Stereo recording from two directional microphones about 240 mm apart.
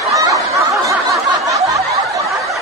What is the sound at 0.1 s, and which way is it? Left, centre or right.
Snicker, centre.